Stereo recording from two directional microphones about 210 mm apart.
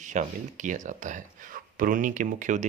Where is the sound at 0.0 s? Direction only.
35° right (ahead or behind).